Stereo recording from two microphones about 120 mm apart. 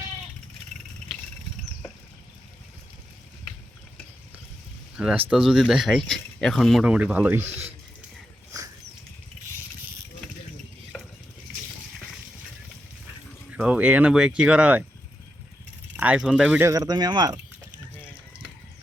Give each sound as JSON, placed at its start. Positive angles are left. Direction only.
{"t": 4.9, "sound": "speech", "side_deg": -10}
{"t": 10.9, "sound": "a sound", "side_deg": 5}
{"t": 13.6, "sound": "speech", "side_deg": -10}
{"t": 16.0, "sound": "speech", "side_deg": -10}
{"t": 16.6, "sound": "speech", "side_deg": -30}